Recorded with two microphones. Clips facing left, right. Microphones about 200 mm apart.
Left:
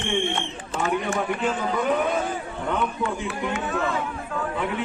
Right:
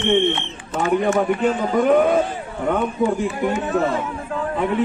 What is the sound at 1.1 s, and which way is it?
Speech, 55° right (ahead or behind).